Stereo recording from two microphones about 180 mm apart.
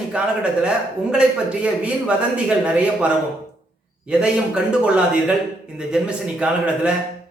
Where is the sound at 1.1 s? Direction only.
5° right (ahead or behind).